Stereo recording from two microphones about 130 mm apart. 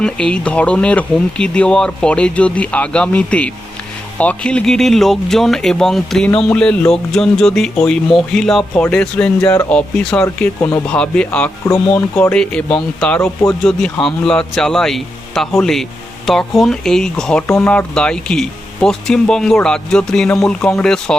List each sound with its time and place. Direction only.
0.0 s speech: 5° left (ahead or behind)
11.6 s speech: 20° left (ahead or behind)
12.2 s speech: 10° left (ahead or behind)
13.1 s speech: 20° left (ahead or behind)
13.5 s speech: 5° left (ahead or behind)